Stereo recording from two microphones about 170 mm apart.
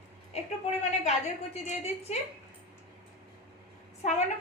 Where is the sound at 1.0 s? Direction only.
40° left (ahead or behind).